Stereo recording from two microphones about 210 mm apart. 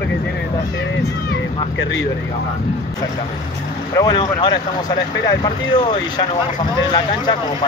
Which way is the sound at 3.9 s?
20° left (ahead or behind).